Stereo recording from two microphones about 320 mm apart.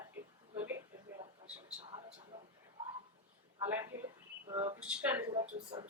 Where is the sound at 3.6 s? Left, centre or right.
Centre.